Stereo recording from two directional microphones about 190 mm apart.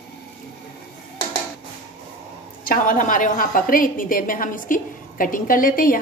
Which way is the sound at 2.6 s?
45° left (ahead or behind).